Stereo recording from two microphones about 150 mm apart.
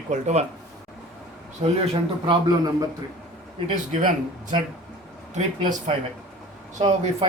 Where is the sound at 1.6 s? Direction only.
45° right (ahead or behind).